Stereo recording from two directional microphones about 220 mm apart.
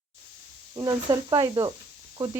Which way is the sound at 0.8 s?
15° right (ahead or behind).